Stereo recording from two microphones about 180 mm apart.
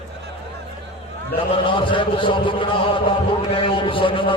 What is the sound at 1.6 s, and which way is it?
A man's voice, 30° left (ahead or behind).